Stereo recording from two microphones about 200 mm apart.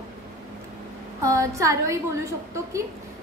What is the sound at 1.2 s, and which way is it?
Speech, 15° right (ahead or behind).